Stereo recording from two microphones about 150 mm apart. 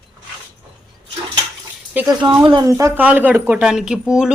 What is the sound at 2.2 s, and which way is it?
A man's voice, 30° right (ahead or behind).